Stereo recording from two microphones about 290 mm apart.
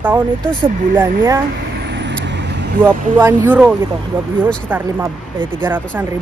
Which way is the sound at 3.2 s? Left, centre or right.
Centre.